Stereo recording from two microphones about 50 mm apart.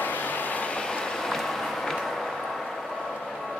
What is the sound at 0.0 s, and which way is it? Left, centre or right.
Vehicle, left.